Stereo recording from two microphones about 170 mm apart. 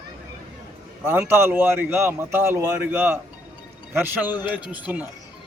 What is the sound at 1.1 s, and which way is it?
A man's voice, 15° right (ahead or behind).